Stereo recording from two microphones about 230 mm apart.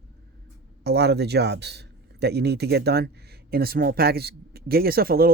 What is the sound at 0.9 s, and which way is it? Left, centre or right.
Speech, right.